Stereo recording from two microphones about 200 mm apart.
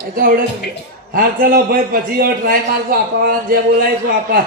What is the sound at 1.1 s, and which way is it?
A man's voice, 45° right (ahead or behind).